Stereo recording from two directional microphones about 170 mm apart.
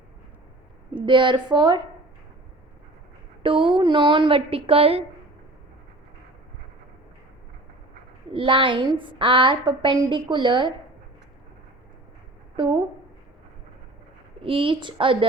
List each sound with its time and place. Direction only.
0.9 s a woman's voice: 30° right (ahead or behind)
3.4 s a woman's voice: 30° right (ahead or behind)
8.3 s a woman's voice: 30° right (ahead or behind)
12.5 s a woman's voice: 30° right (ahead or behind)
14.4 s a woman's voice: 30° right (ahead or behind)